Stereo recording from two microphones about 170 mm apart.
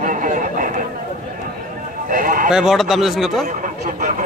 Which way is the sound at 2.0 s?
50° right (ahead or behind).